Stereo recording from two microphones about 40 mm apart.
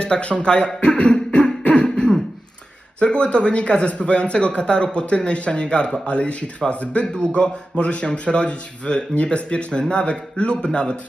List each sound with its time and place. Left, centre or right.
0.0 s speech: left
0.8 s beatboxing: left
3.0 s speech: left